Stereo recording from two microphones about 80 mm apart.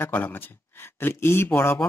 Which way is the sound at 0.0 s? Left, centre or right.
Left.